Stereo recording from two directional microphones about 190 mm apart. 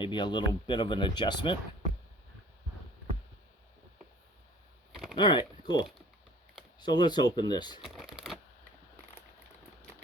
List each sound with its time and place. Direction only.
0.0 s speech: 25° left (ahead or behind)
5.1 s speech: 25° left (ahead or behind)
6.7 s speech: 20° left (ahead or behind)
7.9 s shuffling cards: centre (ahead or behind)